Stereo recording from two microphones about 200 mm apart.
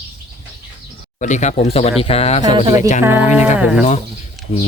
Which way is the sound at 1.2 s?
35° left (ahead or behind).